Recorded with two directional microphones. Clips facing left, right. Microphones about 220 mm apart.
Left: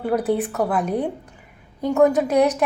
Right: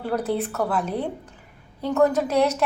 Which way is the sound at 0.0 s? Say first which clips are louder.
Left 4 dB; 10° left (ahead or behind).